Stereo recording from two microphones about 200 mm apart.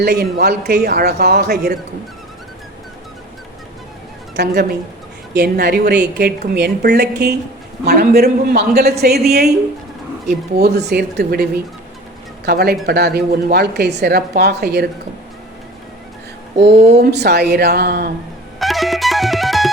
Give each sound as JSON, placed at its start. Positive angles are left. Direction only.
{"t": 0.0, "sound": "a woman's voice", "side_deg": -55}
{"t": 4.4, "sound": "a woman's voice", "side_deg": -55}
{"t": 12.5, "sound": "a woman's voice", "side_deg": -55}
{"t": 16.9, "sound": "a woman's voice", "side_deg": -55}
{"t": 18.6, "sound": "music", "side_deg": 0}